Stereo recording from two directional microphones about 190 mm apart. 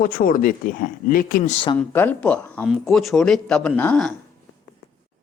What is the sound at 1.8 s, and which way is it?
Speech, 10° left (ahead or behind).